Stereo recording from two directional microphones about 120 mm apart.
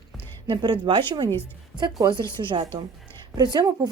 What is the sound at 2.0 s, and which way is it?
A woman's voice, 40° right (ahead or behind).